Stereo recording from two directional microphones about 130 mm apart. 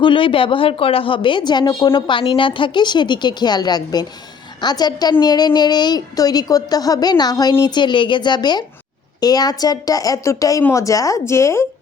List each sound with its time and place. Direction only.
0.0 s a woman's voice: 40° left (ahead or behind); by 11.6 s 20° left (ahead or behind)